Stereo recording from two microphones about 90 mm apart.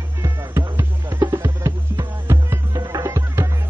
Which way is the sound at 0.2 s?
35° right (ahead or behind).